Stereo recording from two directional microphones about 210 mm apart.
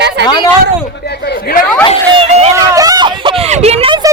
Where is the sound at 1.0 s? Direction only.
50° left (ahead or behind).